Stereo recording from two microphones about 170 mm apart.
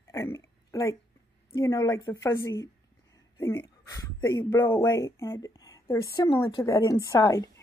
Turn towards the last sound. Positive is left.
turn(degrees=20)  # may be behind; listen again after turning